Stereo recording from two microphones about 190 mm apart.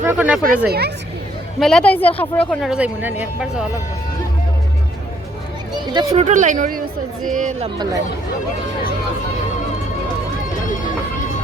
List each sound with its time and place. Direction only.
0.0 s speech: 10° right (ahead or behind)
0.7 s speech: 60° right (ahead or behind)
1.5 s speech: centre (ahead or behind)
5.7 s a sound: 25° right (ahead or behind)
6.1 s a woman's voice: 40° right (ahead or behind)